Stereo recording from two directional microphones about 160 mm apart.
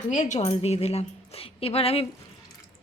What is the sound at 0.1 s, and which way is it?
A woman's voice, 50° left (ahead or behind).